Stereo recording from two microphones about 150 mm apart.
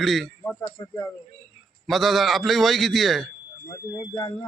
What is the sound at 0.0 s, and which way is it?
Speech, centre (ahead or behind).